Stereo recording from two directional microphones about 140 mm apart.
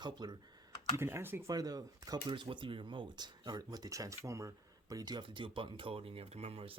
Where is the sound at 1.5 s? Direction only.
25° right (ahead or behind).